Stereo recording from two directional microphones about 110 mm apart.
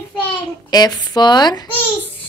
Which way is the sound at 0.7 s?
35° left (ahead or behind).